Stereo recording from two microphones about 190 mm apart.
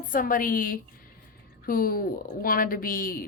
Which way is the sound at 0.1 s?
45° left (ahead or behind).